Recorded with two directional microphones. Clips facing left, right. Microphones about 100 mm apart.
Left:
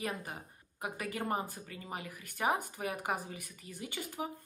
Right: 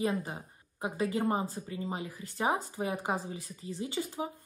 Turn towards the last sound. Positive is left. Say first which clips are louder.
# right 5 dB
turn(degrees=-20)  # may be behind; listen again after turning